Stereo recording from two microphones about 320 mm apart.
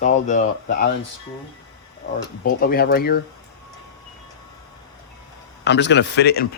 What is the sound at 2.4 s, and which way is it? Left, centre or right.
Speech, left.